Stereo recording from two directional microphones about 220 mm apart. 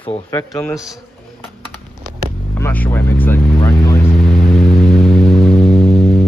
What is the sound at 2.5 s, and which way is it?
Vehicle, 10° left (ahead or behind).